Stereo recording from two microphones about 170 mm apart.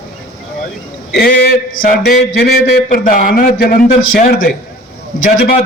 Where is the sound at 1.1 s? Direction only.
70° left (ahead or behind).